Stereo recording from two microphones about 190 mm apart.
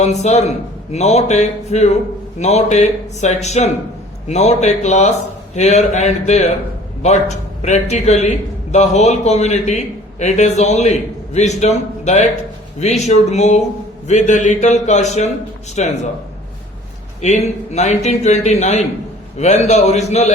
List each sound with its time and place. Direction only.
0.0 s a man's voice: 35° left (ahead or behind)
17.2 s a man's voice: 35° left (ahead or behind)